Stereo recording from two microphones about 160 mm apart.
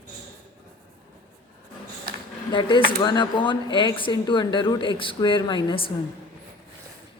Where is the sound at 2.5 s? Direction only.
30° left (ahead or behind).